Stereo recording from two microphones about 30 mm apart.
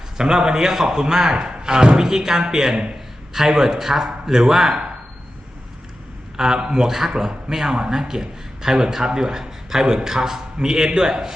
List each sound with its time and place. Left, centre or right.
0.2 s a man's voice: right
6.3 s a man's voice: right